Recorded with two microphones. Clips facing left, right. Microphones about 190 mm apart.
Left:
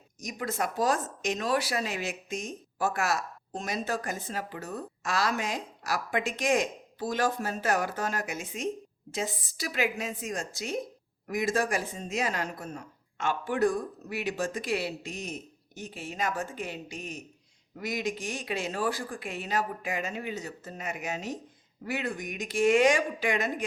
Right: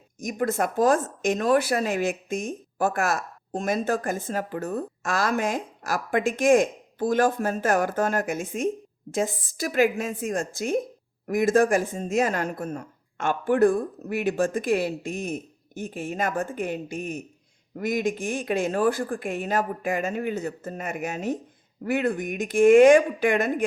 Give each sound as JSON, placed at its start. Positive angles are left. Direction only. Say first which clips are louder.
{"t": 0.2, "sound": "speech", "louder": "right 7 dB", "side_deg": -50}